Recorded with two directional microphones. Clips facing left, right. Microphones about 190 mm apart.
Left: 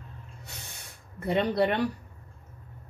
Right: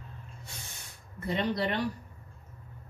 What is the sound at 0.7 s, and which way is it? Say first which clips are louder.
Spray: left 2 dB; 60° left (ahead or behind).